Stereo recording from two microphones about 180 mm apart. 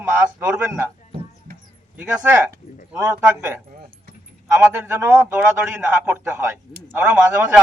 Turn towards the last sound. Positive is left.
turn(degrees=-10)  # may be behind; listen again after turning